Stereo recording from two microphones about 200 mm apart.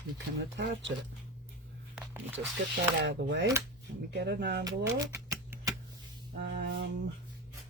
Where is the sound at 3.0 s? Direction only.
60° right (ahead or behind).